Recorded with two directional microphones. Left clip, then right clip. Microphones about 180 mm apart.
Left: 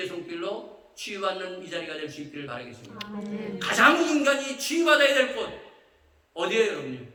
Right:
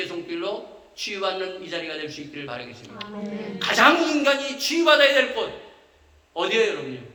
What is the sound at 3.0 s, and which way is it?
Speech, 45° left (ahead or behind).